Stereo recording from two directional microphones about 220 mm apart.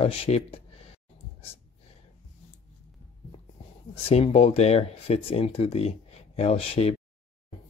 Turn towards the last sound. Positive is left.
turn(degrees=25)  # may be behind; listen again after turning